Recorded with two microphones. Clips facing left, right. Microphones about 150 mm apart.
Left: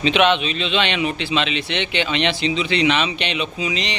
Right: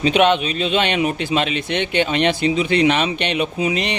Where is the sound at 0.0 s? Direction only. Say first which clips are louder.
Right 2 dB; 45° right (ahead or behind).